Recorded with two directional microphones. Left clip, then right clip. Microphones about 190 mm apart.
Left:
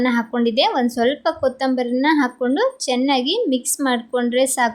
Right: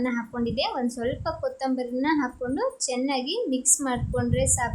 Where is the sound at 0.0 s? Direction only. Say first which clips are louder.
Left 9 dB; 30° left (ahead or behind).